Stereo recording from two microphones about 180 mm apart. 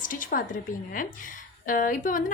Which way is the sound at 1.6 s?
50° left (ahead or behind).